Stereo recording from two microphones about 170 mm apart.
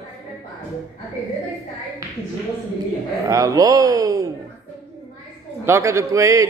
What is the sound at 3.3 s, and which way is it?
A man's voice, 20° right (ahead or behind).